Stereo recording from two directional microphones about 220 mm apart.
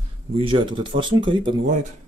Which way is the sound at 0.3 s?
25° right (ahead or behind).